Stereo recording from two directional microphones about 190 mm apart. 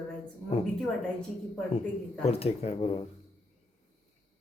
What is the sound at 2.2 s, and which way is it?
Speech, 30° left (ahead or behind).